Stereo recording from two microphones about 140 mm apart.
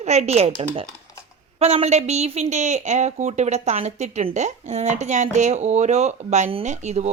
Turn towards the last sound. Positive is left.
turn(degrees=-55)  # may be behind; listen again after turning